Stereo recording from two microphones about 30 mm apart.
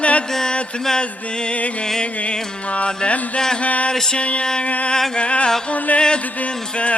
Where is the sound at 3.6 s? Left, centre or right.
Left.